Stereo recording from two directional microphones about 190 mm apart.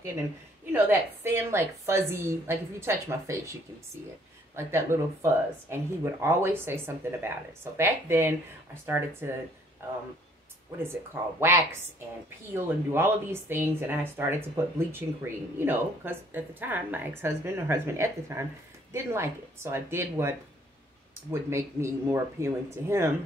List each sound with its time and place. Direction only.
0.7 s speech: 10° right (ahead or behind)
4.6 s speech: 15° right (ahead or behind)
11.3 s speech: 15° right (ahead or behind)